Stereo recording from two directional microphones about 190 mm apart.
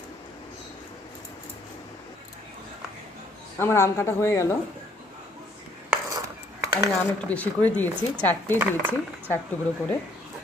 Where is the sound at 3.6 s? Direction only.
15° left (ahead or behind).